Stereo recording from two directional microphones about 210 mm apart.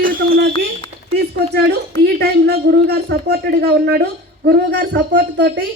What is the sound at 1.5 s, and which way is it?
A woman's voice, 50° right (ahead or behind).